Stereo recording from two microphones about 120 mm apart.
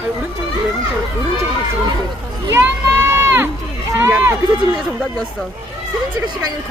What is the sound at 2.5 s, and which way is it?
Run, 20° right (ahead or behind).